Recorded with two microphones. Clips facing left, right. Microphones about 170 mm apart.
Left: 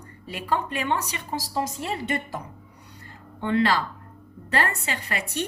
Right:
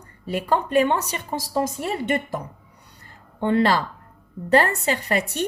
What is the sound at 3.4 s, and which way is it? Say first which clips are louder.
A woman's voice: right 3 dB; 45° right (ahead or behind).